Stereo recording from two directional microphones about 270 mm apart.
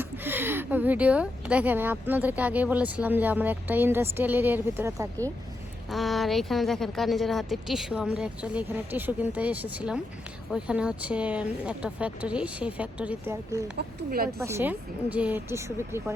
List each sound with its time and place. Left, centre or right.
0.0 s speech: centre
13.7 s speech: right
14.3 s speech: centre